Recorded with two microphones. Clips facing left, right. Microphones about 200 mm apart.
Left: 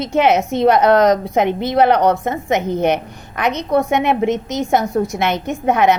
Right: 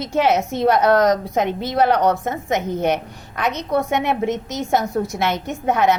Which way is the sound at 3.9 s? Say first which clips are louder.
Left 4 dB; 60° left (ahead or behind).